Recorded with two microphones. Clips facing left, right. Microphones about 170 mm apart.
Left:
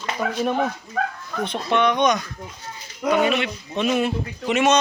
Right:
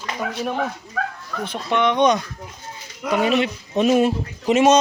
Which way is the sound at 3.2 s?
35° right (ahead or behind).